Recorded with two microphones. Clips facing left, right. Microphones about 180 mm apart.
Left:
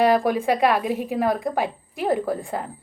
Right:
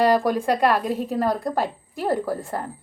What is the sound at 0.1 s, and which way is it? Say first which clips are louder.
A woman's voice: even; centre (ahead or behind).